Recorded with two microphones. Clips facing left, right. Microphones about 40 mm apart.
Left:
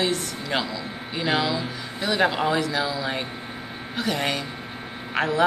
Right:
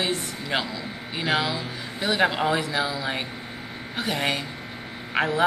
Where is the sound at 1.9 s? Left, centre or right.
Centre.